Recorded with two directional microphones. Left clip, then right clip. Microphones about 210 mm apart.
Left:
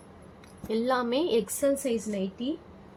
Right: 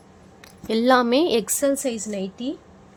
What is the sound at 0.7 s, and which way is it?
A woman's voice, 55° right (ahead or behind).